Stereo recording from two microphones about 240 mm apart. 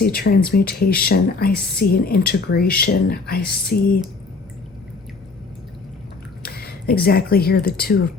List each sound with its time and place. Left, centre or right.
0.0 s speech: left
6.4 s a sound: left
7.0 s speech: left